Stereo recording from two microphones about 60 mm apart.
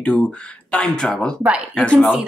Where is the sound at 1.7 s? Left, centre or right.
Centre.